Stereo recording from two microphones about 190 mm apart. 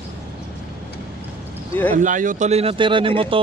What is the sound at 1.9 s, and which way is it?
Speech, 45° right (ahead or behind).